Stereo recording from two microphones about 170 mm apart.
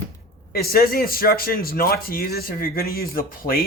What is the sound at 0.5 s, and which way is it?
Speech, 60° left (ahead or behind).